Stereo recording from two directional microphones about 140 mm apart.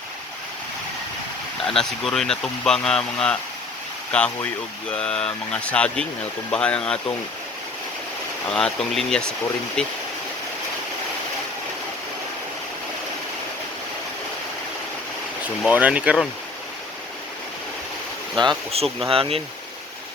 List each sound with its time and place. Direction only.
1.6 s speech: 5° left (ahead or behind)
8.4 s speech: 5° left (ahead or behind)
15.6 s speech: 10° right (ahead or behind)
19.0 s speech: 40° right (ahead or behind)